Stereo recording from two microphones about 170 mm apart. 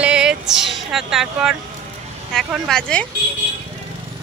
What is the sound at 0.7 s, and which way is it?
Speech, centre (ahead or behind).